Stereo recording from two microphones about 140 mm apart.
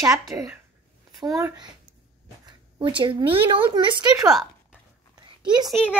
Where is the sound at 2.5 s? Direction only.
35° right (ahead or behind).